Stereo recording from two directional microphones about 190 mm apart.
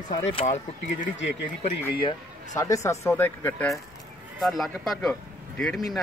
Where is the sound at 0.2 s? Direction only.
30° left (ahead or behind).